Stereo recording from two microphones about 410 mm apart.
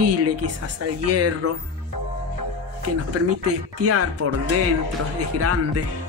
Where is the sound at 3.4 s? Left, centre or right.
Right.